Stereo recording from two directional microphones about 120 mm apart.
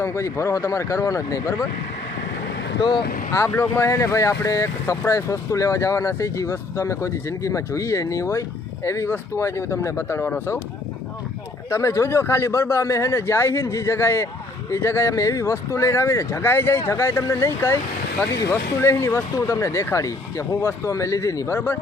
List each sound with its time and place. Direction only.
0.0 s speech: 20° left (ahead or behind)
3.3 s speech: 20° left (ahead or behind)
11.7 s speech: 25° left (ahead or behind)